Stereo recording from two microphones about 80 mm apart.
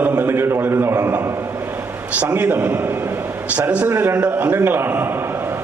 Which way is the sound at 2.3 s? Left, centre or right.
Right.